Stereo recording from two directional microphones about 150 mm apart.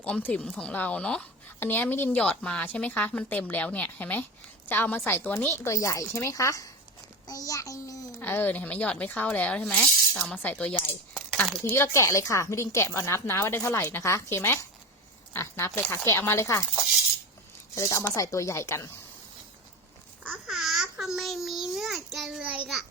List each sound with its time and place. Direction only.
0.0 s a woman's voice: 10° left (ahead or behind)
17.7 s speech: 20° left (ahead or behind)
20.2 s babbling: 5° right (ahead or behind)